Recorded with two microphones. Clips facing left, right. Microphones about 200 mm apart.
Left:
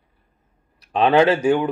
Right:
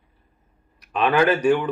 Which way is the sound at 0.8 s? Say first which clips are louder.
Left 4 dB; 30° left (ahead or behind).